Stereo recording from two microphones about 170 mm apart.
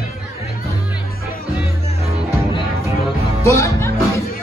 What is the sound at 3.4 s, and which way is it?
Speech, 15° left (ahead or behind).